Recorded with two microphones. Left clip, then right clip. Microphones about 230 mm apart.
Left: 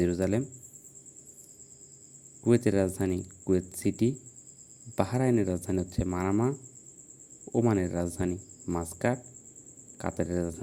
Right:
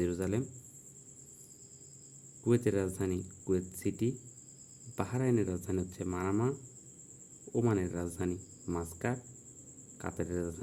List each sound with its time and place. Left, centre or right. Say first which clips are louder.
0.0 s speech: left 6 dB; centre
2.6 s speech: left 5 dB; centre